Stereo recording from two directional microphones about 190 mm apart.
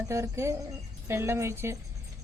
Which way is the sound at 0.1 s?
15° right (ahead or behind).